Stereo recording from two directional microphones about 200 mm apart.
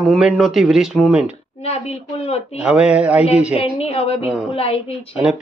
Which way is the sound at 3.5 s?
30° left (ahead or behind).